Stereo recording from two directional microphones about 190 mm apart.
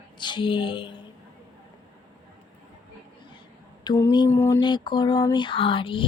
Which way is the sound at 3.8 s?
20° left (ahead or behind).